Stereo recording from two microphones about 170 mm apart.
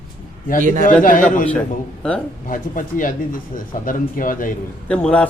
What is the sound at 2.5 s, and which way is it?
Speech, 50° left (ahead or behind).